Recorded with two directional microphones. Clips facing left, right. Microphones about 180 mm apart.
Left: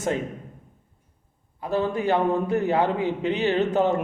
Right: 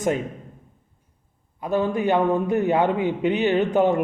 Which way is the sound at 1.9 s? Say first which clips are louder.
Right 2 dB; 20° right (ahead or behind).